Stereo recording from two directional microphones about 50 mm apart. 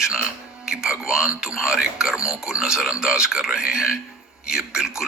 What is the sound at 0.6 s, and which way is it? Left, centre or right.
A man's voice, centre.